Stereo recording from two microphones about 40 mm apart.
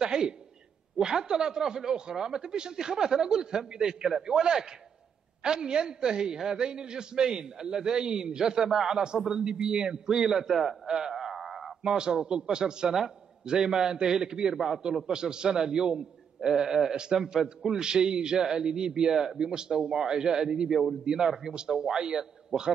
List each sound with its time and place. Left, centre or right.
0.0 s a man's voice: centre
10.9 s a sound: centre
11.8 s a man's voice: centre
22.5 s a man's voice: centre